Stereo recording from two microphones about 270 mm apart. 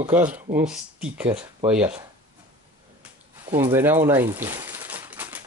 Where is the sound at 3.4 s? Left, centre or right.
Centre.